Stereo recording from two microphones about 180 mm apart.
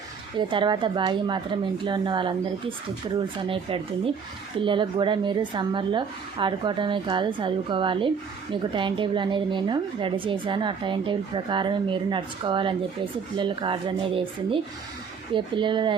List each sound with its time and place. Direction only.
0.3 s a woman's voice: 25° right (ahead or behind)